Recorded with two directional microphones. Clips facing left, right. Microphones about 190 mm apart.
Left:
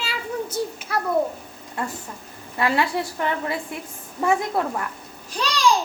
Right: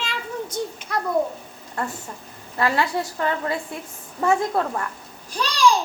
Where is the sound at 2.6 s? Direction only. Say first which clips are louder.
Even; 20° left (ahead or behind).